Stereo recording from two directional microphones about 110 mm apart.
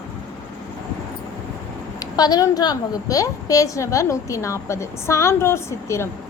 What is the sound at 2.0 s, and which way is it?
A woman's voice, 35° left (ahead or behind).